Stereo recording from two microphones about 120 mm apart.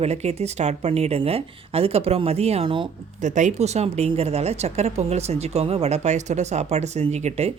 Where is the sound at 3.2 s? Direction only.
90° right; by 7.5 s 65° right (ahead or behind).